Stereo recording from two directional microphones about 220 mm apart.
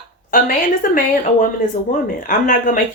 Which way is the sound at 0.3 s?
40° left (ahead or behind).